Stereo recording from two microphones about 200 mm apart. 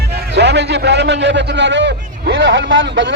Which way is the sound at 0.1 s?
60° right (ahead or behind).